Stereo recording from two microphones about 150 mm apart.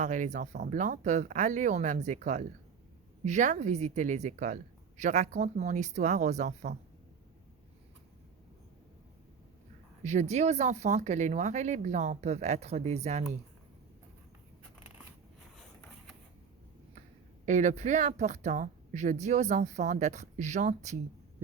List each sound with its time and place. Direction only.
0.0 s a woman's voice: 55° right (ahead or behind)
10.0 s a woman's voice: 50° right (ahead or behind)
17.4 s a woman's voice: 55° right (ahead or behind)